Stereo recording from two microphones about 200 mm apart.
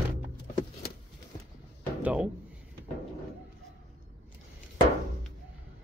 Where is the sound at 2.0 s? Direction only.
5° right (ahead or behind).